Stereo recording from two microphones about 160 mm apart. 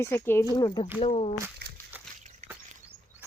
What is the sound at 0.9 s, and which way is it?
Speech, 35° left (ahead or behind).